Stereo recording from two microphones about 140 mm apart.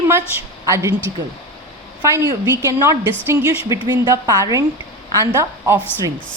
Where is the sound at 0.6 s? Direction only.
20° right (ahead or behind).